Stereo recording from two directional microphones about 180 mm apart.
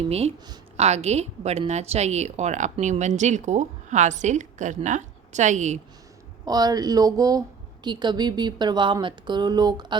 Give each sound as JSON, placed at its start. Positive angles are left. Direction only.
{"t": 0.1, "sound": "a woman's voice", "side_deg": -35}
{"t": 6.4, "sound": "a woman's voice", "side_deg": -20}